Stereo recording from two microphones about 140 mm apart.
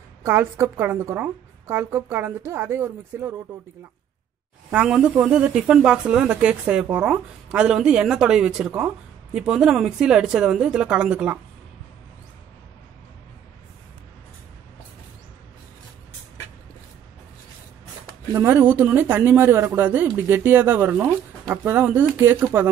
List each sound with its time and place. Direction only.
0.2 s speech: 15° right (ahead or behind)
4.6 s speech: 5° right (ahead or behind)
18.3 s speech: 15° right (ahead or behind)